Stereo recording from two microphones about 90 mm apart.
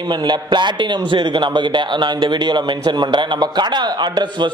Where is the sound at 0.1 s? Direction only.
55° right (ahead or behind).